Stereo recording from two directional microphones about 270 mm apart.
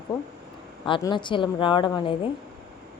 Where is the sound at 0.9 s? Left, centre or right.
Centre.